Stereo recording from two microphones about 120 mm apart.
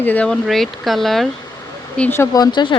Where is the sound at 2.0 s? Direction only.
15° left (ahead or behind).